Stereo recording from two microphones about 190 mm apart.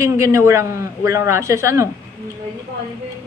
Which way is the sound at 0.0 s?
15° right (ahead or behind).